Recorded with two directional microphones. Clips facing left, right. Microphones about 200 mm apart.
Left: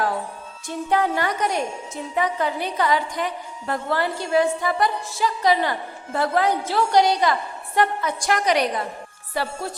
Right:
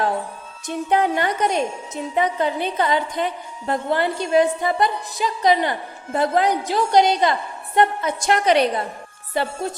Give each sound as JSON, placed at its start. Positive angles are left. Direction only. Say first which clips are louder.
{"t": 0.7, "sound": "a woman's voice", "louder": "right 2 dB", "side_deg": -20}